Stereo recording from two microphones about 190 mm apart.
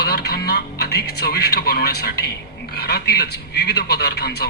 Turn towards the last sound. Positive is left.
turn(degrees=60)  # may be behind; listen again after turning